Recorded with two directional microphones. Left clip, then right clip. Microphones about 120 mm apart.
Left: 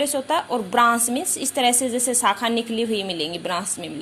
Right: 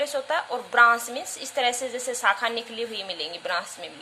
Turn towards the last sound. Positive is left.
turn(degrees=25)  # may be behind; listen again after turning